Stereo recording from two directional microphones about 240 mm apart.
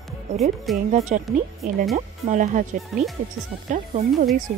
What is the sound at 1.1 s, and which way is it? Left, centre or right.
Speech, right.